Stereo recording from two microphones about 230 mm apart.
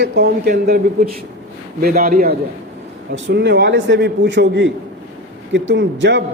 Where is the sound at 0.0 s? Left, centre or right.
Right.